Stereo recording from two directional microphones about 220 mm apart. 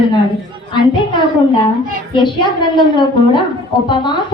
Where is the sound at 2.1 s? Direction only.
20° left (ahead or behind).